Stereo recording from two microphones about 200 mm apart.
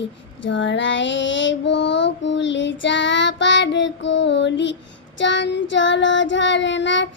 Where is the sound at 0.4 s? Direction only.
65° left (ahead or behind).